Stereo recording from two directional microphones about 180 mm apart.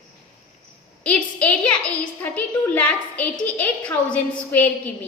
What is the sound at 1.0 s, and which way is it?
A woman's voice, 5° left (ahead or behind).